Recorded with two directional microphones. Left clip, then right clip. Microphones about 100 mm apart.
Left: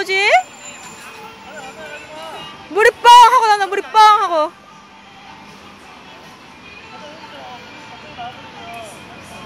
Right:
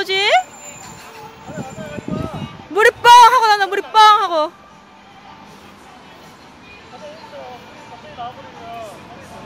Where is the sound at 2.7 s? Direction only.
20° right (ahead or behind).